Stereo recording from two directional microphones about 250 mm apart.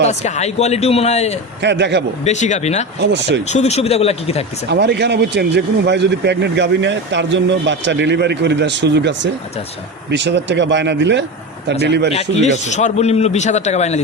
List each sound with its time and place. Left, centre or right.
0.0 s a man's voice: left
1.6 s speech: right
2.2 s a man's voice: left
3.0 s speech: right
3.4 s a man's voice: left
4.7 s speech: right
12.1 s a man's voice: left